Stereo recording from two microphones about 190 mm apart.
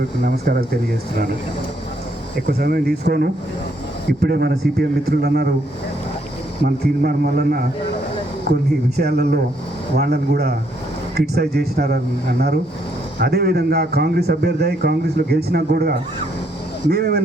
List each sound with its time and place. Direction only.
0.2 s a man's voice: 50° right (ahead or behind)
2.5 s a man's voice: 55° right (ahead or behind)
6.7 s a man's voice: 55° right (ahead or behind)